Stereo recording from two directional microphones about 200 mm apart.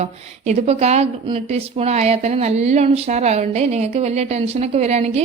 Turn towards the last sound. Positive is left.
turn(degrees=-35)  # may be behind; listen again after turning